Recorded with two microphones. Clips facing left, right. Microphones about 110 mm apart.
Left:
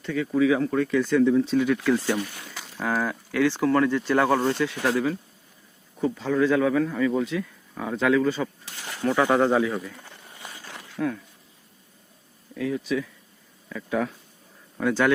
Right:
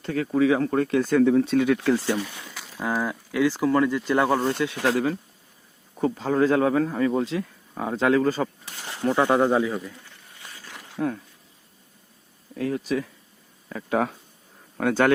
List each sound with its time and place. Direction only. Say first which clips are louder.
0.0 s speech: right 1 dB; 45° right (ahead or behind)
2.7 s speech: even; 10° right (ahead or behind)
6.1 s speech: right 1 dB; 40° right (ahead or behind)
9.3 s speech: even; 15° right (ahead or behind)
11.0 s speech: right 1 dB; 20° right (ahead or behind)
12.5 s speech: right 1 dB; 45° right (ahead or behind)
13.9 s speech: right 3 dB; 60° right (ahead or behind)